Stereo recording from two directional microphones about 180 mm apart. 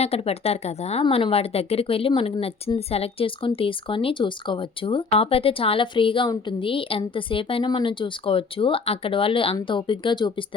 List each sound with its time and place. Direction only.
0.0 s speech: 35° left (ahead or behind)